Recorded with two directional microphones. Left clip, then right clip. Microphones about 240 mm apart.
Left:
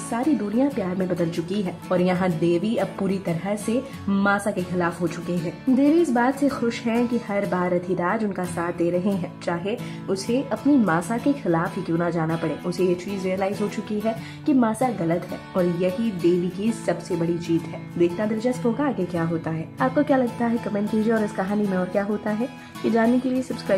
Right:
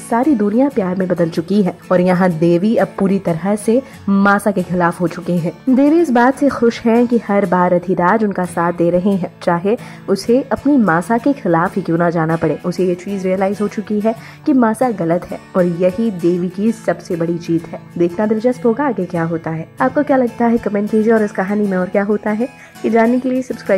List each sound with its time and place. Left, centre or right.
0.1 s speech: centre